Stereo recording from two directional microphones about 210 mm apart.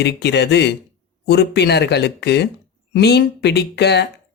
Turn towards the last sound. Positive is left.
turn(degrees=50)  # may be behind; listen again after turning